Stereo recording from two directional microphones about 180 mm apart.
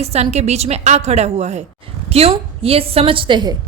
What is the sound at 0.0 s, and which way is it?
A woman's voice, 35° right (ahead or behind).